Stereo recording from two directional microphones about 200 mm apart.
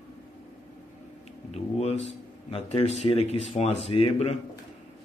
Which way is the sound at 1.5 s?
30° left (ahead or behind).